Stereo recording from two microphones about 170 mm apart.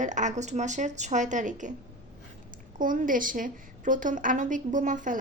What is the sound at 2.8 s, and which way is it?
Speech, 50° right (ahead or behind).